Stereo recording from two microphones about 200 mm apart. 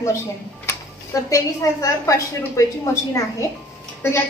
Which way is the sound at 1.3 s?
15° left (ahead or behind).